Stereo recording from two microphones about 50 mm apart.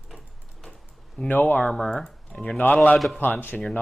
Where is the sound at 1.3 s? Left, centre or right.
Left.